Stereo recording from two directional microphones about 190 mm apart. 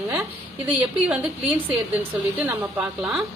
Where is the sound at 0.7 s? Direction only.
5° right (ahead or behind).